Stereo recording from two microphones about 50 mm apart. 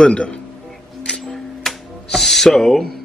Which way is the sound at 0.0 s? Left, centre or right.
Left.